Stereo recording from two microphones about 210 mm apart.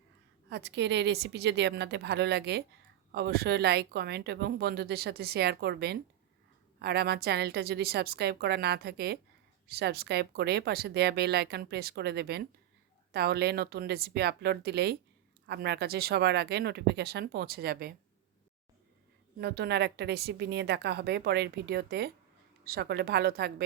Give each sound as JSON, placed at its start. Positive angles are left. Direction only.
{"t": 0.5, "sound": "speech", "side_deg": -55}
{"t": 19.4, "sound": "speech", "side_deg": -50}